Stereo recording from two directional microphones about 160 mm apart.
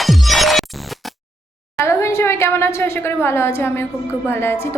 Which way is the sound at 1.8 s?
15° left (ahead or behind).